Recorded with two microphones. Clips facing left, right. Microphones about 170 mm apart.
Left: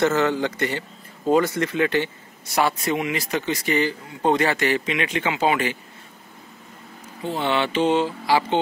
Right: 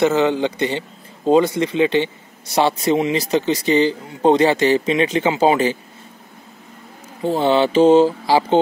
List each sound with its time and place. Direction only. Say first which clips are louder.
0.0 s speech: right 4 dB; 15° right (ahead or behind)
7.2 s speech: right 7 dB; 35° right (ahead or behind)